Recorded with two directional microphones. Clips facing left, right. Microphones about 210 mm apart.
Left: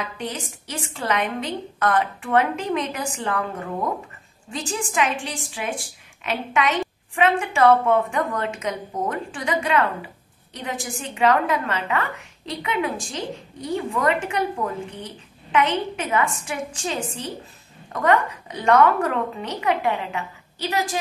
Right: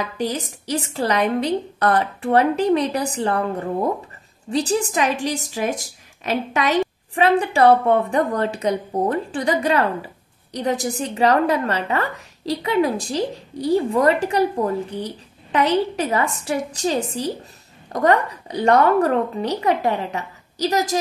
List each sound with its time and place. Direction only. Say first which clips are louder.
0.0 s a woman's voice: right 6 dB; 40° right (ahead or behind)